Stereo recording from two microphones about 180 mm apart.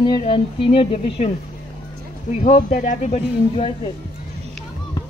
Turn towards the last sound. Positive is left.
turn(degrees=35)  # may be behind; listen again after turning